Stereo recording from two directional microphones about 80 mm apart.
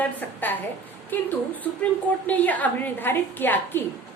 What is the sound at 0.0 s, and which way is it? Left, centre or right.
A woman's voice, left.